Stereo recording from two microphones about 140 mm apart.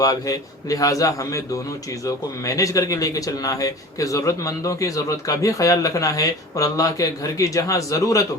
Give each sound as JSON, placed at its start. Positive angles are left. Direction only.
{"t": 0.0, "sound": "a man's voice", "side_deg": 25}